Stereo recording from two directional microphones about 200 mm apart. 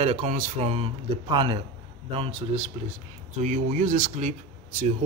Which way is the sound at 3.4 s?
40° right (ahead or behind).